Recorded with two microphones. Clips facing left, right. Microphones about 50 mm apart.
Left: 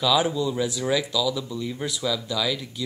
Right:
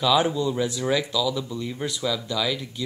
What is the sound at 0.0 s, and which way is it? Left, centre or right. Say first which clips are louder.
Speech: right 1 dB; centre.